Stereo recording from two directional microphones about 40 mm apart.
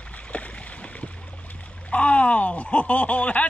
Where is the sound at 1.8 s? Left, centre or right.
Left.